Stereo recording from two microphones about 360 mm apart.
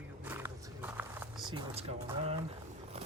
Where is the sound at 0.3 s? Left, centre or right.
Centre.